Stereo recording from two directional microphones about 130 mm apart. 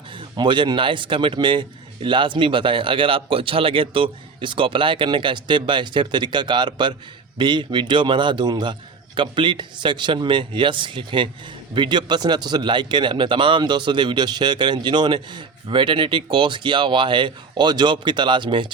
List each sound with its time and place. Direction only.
0.2 s a man's voice: 40° right (ahead or behind)